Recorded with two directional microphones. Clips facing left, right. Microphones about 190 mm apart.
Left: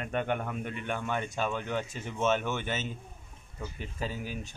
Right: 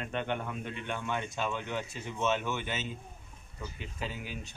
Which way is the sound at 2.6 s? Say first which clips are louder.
Left 2 dB; 45° left (ahead or behind).